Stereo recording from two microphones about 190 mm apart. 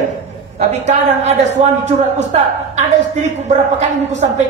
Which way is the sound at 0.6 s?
35° right (ahead or behind).